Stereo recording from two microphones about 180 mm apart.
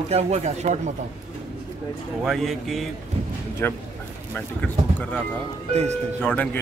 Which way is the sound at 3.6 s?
10° left (ahead or behind).